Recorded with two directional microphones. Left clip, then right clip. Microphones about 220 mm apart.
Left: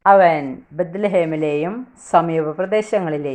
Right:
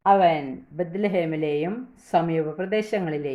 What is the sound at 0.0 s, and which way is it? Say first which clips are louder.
Speech: left 6 dB; 20° left (ahead or behind).